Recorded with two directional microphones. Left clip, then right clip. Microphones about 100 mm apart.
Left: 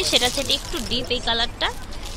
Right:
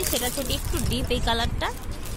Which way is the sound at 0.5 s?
15° right (ahead or behind).